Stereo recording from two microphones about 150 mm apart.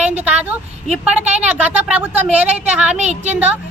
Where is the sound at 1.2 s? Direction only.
50° right (ahead or behind).